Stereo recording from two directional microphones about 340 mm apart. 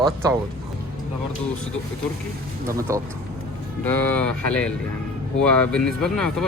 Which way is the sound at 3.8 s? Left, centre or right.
Centre.